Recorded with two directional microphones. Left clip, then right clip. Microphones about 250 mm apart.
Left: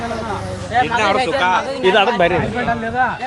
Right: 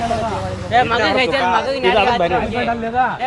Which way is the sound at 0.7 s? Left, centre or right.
Right.